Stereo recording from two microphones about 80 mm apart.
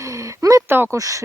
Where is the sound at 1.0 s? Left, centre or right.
Right.